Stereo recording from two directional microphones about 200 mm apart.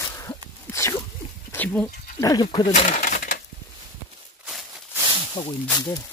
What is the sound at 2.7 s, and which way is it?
Coin, 35° left (ahead or behind).